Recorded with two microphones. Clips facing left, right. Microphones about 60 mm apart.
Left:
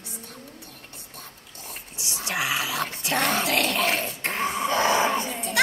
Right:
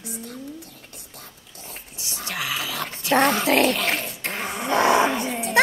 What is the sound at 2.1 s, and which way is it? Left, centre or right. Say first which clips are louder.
Dog: left 2 dB; centre.